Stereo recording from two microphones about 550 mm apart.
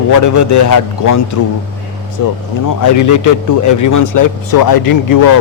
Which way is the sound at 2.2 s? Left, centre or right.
Left.